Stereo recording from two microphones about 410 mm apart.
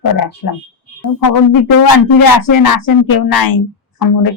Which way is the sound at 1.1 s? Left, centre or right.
Left.